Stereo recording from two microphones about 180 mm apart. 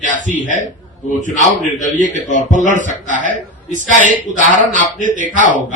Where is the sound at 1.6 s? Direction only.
45° left (ahead or behind).